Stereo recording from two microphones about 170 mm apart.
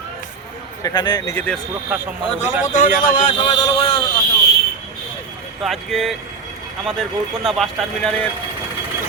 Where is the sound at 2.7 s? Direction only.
55° left (ahead or behind).